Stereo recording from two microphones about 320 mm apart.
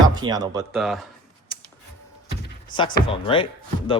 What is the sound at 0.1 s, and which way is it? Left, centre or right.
Speech, centre.